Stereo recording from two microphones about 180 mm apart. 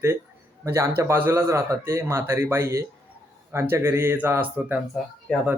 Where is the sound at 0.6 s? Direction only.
15° right (ahead or behind).